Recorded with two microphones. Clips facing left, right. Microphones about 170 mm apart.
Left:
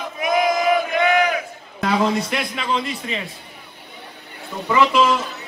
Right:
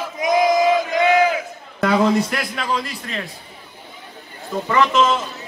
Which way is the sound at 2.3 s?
Centre (ahead or behind).